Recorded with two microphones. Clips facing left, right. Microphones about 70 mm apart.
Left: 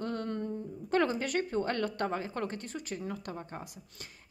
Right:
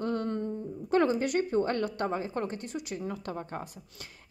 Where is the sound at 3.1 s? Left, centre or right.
Right.